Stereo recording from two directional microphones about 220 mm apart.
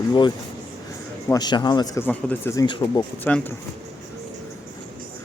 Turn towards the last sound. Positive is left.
turn(degrees=5)  # may be behind; listen again after turning